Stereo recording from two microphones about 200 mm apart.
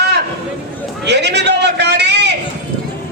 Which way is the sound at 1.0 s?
60° right (ahead or behind).